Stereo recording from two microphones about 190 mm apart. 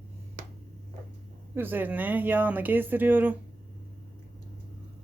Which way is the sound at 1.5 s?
10° right (ahead or behind).